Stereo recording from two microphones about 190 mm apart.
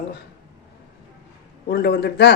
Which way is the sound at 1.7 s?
55° left (ahead or behind).